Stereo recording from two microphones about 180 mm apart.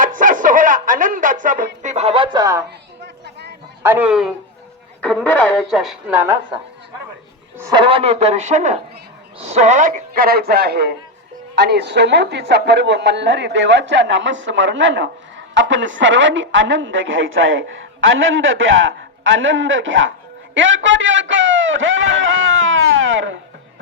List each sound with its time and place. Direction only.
0.0 s a sound: 45° right (ahead or behind); by 2.6 s 20° right (ahead or behind)
3.8 s speech: 10° right (ahead or behind)
7.6 s a woman's voice: 30° right (ahead or behind); by 23.4 s 90° right